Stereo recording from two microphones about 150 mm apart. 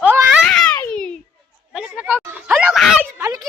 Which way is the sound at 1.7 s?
5° right (ahead or behind).